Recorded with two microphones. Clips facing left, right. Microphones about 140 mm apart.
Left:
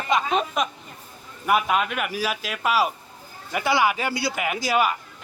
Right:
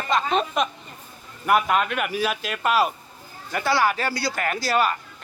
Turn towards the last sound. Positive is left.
turn(degrees=10)  # may be behind; listen again after turning